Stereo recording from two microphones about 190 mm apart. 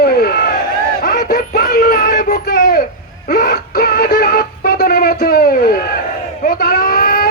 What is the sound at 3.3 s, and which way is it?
Synthetic singing, 55° left (ahead or behind).